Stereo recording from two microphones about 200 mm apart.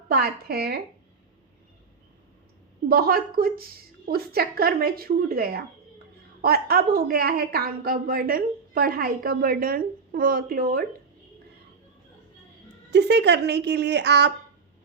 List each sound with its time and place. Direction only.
0.1 s a woman's voice: 50° right (ahead or behind)
2.9 s a woman's voice: 50° right (ahead or behind)
12.9 s a woman's voice: 60° right (ahead or behind)